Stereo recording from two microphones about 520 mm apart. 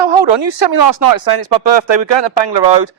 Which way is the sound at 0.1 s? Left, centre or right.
Right.